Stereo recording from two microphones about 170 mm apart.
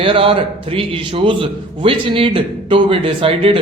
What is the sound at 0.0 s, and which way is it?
A man's voice, 30° right (ahead or behind).